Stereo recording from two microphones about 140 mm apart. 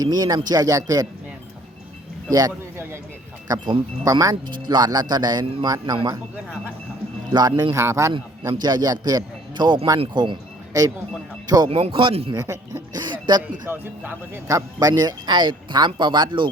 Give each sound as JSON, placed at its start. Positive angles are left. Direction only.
{"t": 0.0, "sound": "a man's voice", "side_deg": -30}
{"t": 2.3, "sound": "a man's voice", "side_deg": -20}
{"t": 7.3, "sound": "a man's voice", "side_deg": -30}
{"t": 11.7, "sound": "speech", "side_deg": -40}
{"t": 12.3, "sound": "speech", "side_deg": -25}
{"t": 13.7, "sound": "speech", "side_deg": -15}